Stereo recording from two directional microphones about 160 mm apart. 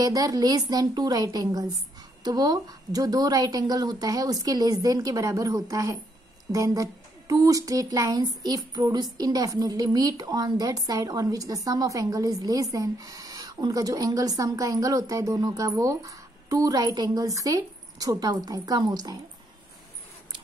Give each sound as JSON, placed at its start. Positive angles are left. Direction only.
{"t": 0.0, "sound": "speech", "side_deg": -20}